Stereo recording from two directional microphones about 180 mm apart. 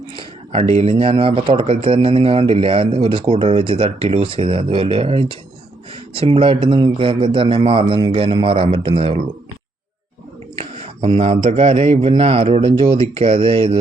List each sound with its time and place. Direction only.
0.2 s speech: 35° right (ahead or behind)
10.6 s a sound: 35° right (ahead or behind)
11.4 s speech: 35° right (ahead or behind)